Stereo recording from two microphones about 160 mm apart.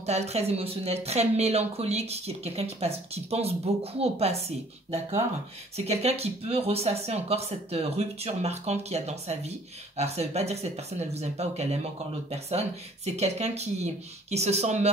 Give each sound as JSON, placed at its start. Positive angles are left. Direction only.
{"t": 0.0, "sound": "speech", "side_deg": -40}